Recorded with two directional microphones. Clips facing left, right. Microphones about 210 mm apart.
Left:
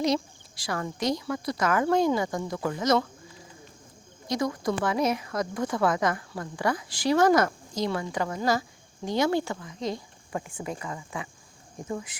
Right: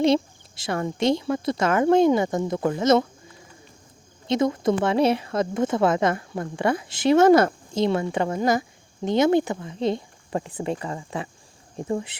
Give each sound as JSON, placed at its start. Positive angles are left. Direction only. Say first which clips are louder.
{"t": 0.0, "sound": "speech", "louder": "right 6 dB", "side_deg": -25}
{"t": 4.3, "sound": "speech", "louder": "right 6 dB", "side_deg": -25}